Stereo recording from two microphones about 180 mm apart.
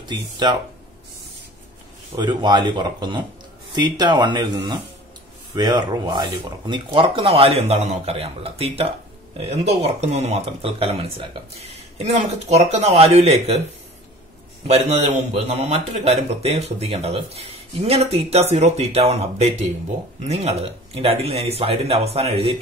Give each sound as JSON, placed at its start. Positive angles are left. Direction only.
{"t": 0.0, "sound": "speech", "side_deg": -25}
{"t": 2.1, "sound": "a man's voice", "side_deg": -25}
{"t": 14.7, "sound": "a man's voice", "side_deg": -35}